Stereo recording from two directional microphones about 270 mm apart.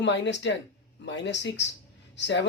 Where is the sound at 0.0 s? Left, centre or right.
Left.